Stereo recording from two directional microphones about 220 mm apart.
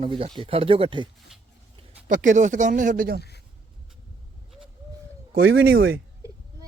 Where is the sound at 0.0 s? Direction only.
25° right (ahead or behind).